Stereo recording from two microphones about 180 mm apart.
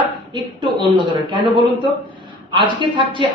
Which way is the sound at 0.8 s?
25° right (ahead or behind).